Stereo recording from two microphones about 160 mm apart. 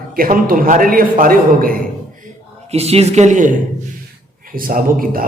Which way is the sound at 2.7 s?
40° right (ahead or behind).